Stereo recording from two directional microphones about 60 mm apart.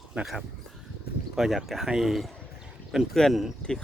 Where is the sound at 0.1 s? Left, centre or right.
Centre.